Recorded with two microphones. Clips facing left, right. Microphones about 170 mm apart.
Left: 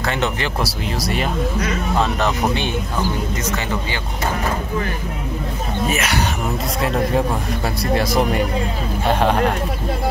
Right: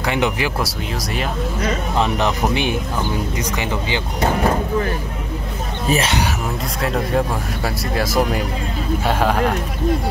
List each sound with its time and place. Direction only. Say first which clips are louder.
0.0 s speech: right 2 dB; 15° right (ahead or behind)
0.6 s speech: left 1 dB; centre (ahead or behind)
2.0 s speech: even; 15° right (ahead or behind)
5.9 s speech: right 5 dB; 30° right (ahead or behind)
6.8 s speech: even; centre (ahead or behind)